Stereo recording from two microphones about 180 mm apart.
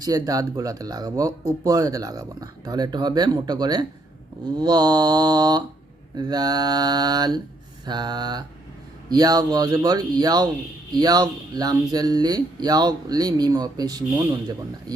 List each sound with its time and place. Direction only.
0.0 s speech: 20° right (ahead or behind)